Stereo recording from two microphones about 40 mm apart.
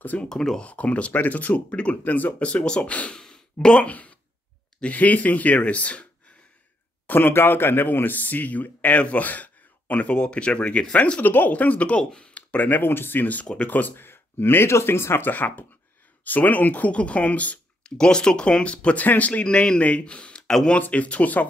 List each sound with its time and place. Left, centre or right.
0.3 s speech: centre
0.6 s speech: left
3.1 s sigh: centre
3.8 s speech: left
7.1 s speech: left
11.1 s speech: left
12.0 s speech: left
12.8 s speech: left
15.3 s speech: left
17.8 s speech: left
18.9 s speech: left
19.4 s speech: left